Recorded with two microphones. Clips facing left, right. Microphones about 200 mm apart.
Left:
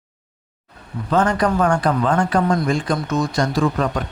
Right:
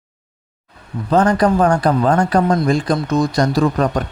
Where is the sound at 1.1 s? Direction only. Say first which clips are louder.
Right 4 dB; 35° right (ahead or behind).